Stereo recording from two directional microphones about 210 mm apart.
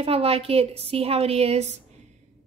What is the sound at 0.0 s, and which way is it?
A woman's voice, 30° right (ahead or behind).